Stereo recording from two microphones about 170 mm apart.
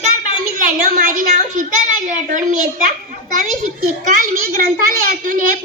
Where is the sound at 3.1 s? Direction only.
50° right (ahead or behind).